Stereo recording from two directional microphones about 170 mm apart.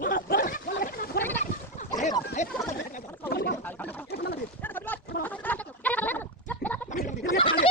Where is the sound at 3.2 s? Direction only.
70° left (ahead or behind).